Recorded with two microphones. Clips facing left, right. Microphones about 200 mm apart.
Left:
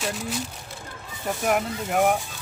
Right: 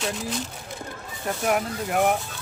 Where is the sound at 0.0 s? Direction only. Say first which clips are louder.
Even; 5° left (ahead or behind).